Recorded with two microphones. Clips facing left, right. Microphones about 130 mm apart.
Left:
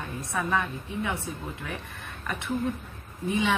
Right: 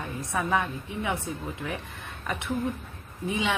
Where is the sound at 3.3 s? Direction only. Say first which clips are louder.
Left 2 dB; 15° right (ahead or behind).